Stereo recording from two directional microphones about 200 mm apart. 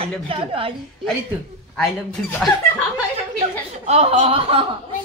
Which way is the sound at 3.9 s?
30° right (ahead or behind).